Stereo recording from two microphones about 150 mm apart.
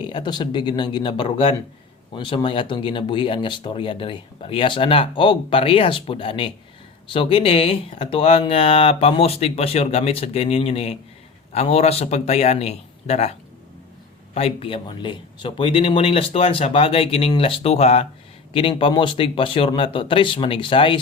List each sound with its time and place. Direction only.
0.0 s speech: 30° left (ahead or behind)
14.3 s speech: 40° left (ahead or behind)